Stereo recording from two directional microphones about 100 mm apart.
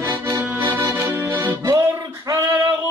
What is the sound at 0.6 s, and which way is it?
Music, 35° right (ahead or behind).